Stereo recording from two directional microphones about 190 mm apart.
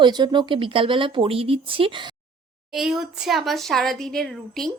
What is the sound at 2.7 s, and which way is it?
A woman's voice, centre (ahead or behind).